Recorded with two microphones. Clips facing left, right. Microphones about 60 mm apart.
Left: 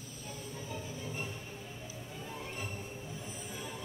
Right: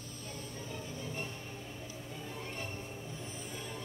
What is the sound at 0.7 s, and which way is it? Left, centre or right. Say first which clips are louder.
Music: left 1 dB; centre.